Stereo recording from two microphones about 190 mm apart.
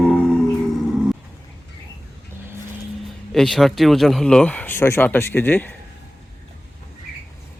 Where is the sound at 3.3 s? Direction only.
Centre (ahead or behind).